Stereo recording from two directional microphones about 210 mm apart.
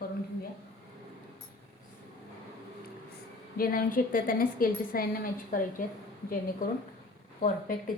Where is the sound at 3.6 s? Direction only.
45° left (ahead or behind).